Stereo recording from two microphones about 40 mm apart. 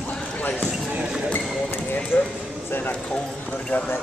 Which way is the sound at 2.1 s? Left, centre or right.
Left.